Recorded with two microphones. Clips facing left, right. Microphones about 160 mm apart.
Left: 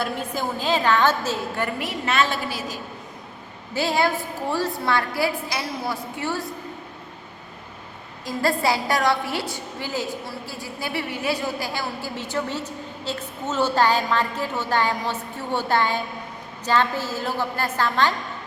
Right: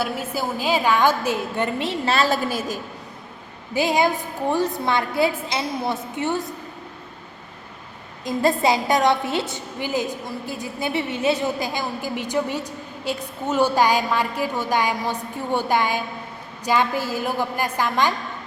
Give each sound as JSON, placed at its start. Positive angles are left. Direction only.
{"t": 0.0, "sound": "a woman's voice", "side_deg": -5}
{"t": 3.8, "sound": "a woman's voice", "side_deg": -15}
{"t": 8.2, "sound": "a woman's voice", "side_deg": -20}